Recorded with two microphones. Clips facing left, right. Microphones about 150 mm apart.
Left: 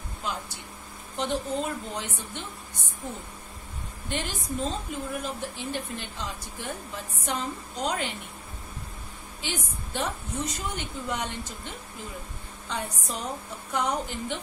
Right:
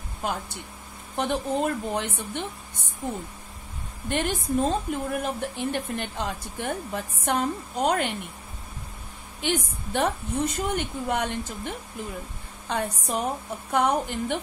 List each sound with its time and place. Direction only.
0.2 s a woman's voice: 50° right (ahead or behind)
4.1 s a woman's voice: 55° right (ahead or behind)
9.4 s a woman's voice: 60° right (ahead or behind)